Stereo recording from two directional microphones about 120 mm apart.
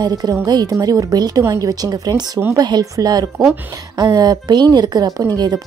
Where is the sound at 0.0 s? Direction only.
35° right (ahead or behind).